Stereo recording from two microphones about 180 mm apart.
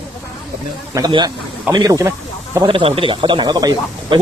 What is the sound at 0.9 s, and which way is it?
Speech, 25° right (ahead or behind).